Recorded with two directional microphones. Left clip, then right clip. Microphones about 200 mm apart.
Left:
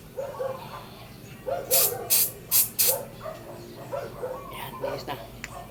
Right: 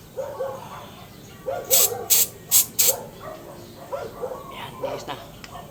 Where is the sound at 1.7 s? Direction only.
25° right (ahead or behind).